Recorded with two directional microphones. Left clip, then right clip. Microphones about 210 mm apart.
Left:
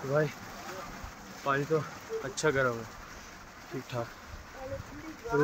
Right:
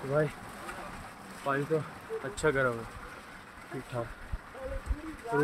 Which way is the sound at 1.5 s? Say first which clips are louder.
Left 1 dB; 10° left (ahead or behind).